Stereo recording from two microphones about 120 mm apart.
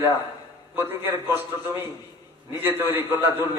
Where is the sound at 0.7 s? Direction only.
15° right (ahead or behind).